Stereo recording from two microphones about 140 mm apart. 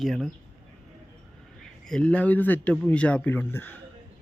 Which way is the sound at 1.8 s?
5° left (ahead or behind).